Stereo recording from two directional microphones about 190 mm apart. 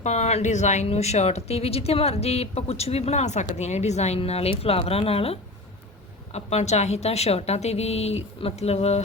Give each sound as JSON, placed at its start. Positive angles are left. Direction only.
{"t": 0.0, "sound": "speech", "side_deg": 35}